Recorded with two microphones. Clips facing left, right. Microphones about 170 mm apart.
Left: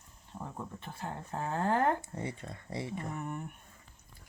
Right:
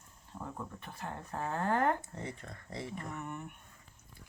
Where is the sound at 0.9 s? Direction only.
25° left (ahead or behind).